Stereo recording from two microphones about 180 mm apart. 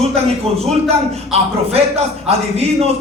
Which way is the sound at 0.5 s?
35° right (ahead or behind).